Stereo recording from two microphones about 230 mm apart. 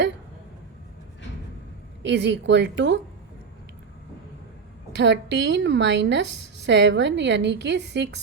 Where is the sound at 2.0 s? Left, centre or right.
Right.